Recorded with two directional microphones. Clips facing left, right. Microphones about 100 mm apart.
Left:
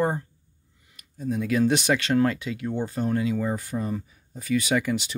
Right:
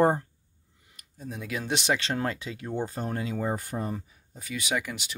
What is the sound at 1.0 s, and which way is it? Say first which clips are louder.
Speech: left 10 dB; 20° right (ahead or behind).